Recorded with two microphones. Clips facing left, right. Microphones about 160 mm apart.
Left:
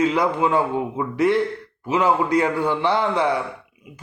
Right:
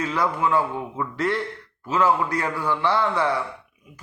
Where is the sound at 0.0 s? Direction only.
20° left (ahead or behind).